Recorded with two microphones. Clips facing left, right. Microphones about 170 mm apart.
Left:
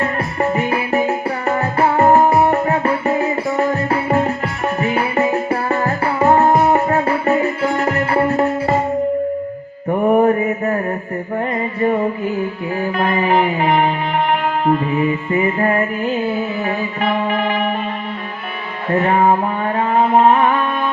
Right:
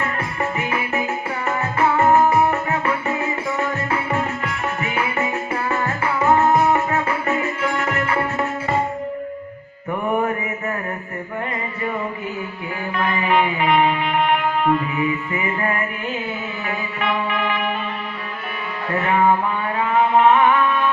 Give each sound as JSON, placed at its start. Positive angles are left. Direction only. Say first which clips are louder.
{"t": 0.0, "sound": "music", "louder": "left 6 dB", "side_deg": 35}
{"t": 9.9, "sound": "mantra", "louder": "left 8 dB", "side_deg": 35}
{"t": 13.0, "sound": "music", "louder": "left 3 dB", "side_deg": 35}
{"t": 15.3, "sound": "music", "louder": "left 7 dB", "side_deg": 35}
{"t": 19.0, "sound": "music", "louder": "left 2 dB", "side_deg": 35}